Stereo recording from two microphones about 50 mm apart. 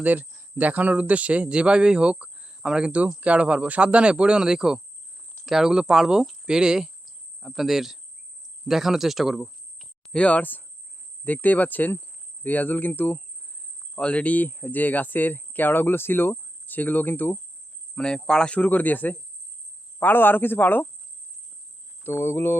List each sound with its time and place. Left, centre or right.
0.0 s a man's voice: right; by 9.8 s centre
10.1 s speech: left
13.9 s speech: left
17.9 s speech: centre
18.5 s speech: left
22.0 s speech: left